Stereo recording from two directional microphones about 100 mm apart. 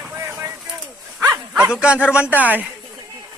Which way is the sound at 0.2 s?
25° right (ahead or behind).